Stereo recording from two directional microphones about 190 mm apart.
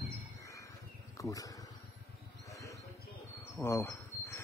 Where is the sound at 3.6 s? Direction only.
15° left (ahead or behind).